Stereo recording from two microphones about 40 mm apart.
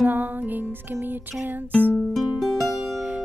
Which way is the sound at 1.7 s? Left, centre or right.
Left.